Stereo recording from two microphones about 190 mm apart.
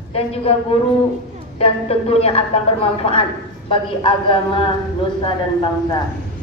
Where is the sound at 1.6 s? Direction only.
30° left (ahead or behind).